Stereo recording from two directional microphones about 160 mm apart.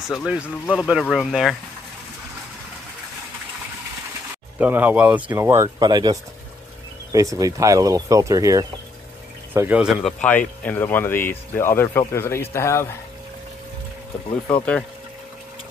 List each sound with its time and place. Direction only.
0.0 s speech: centre (ahead or behind)
4.6 s speech: 10° right (ahead or behind)
10.6 s speech: 10° left (ahead or behind)
14.5 s speech: 5° left (ahead or behind)